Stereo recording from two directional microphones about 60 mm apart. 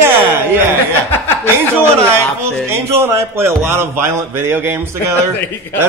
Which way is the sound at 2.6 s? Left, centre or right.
Right.